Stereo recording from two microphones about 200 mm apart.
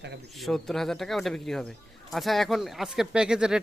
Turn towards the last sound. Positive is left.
turn(degrees=-5)  # may be behind; listen again after turning